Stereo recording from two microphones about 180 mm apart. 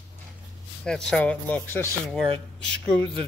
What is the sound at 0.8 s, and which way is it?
Speech, 5° left (ahead or behind).